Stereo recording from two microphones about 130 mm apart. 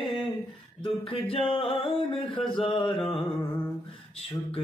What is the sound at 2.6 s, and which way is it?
Mantra, 40° left (ahead or behind).